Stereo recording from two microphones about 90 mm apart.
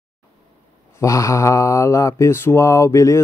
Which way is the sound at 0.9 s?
35° left (ahead or behind).